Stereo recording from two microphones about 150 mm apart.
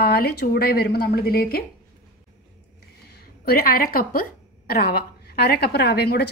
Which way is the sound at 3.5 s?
80° left.